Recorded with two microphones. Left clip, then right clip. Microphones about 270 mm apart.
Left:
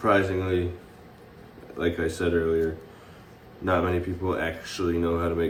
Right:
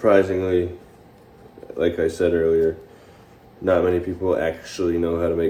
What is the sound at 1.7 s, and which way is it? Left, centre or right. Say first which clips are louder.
Speech: right 6 dB; centre.